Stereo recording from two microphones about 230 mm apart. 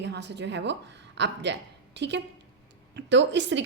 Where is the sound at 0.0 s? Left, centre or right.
Right.